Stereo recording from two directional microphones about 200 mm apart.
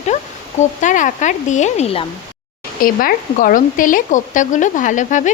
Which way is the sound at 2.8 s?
45° left (ahead or behind).